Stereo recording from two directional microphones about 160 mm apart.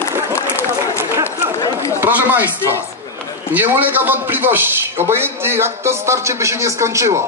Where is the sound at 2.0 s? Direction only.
10° right (ahead or behind).